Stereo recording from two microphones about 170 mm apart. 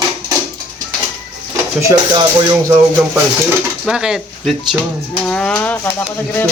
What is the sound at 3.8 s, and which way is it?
Speech, 5° right (ahead or behind).